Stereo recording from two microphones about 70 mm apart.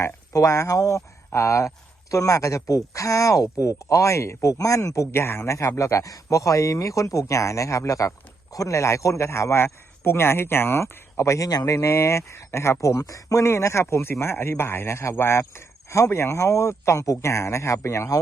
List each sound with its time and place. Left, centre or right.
0.0 s speech: left
5.1 s speech: left
11.4 s speech: left